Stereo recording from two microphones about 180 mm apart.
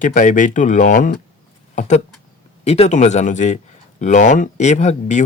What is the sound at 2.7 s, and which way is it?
Speech, 35° left (ahead or behind).